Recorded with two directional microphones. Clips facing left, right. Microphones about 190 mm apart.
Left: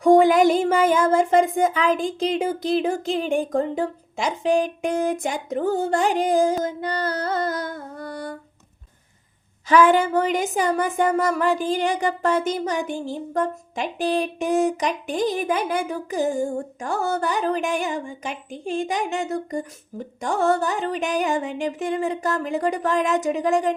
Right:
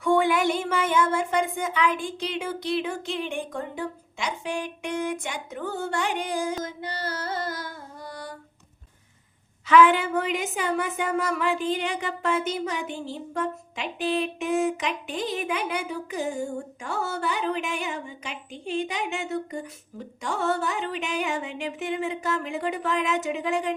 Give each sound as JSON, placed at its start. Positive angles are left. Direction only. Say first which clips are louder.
{"t": 0.0, "sound": "music", "louder": "left 7 dB", "side_deg": 40}
{"t": 2.0, "sound": "speech", "louder": "left 7 dB", "side_deg": 90}
{"t": 2.2, "sound": "music", "louder": "left 8 dB", "side_deg": 40}
{"t": 3.6, "sound": "speech", "louder": "left 8 dB", "side_deg": 40}
{"t": 5.5, "sound": "music", "louder": "left 8 dB", "side_deg": 40}
{"t": 7.7, "sound": "music", "louder": "left 7 dB", "side_deg": 55}
{"t": 9.6, "sound": "speech", "louder": "left 2 dB", "side_deg": 40}